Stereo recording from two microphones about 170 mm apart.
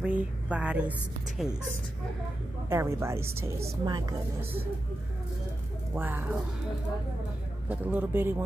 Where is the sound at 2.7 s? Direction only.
15° right (ahead or behind).